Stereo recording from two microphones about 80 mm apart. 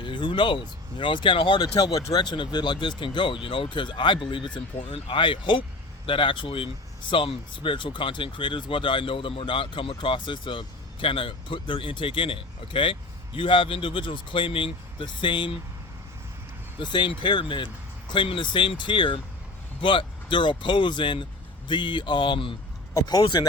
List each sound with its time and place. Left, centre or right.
0.0 s speech: left
2.0 s speech: left
16.8 s speech: left
21.7 s speech: left
23.0 s speech: left
23.2 s speech: left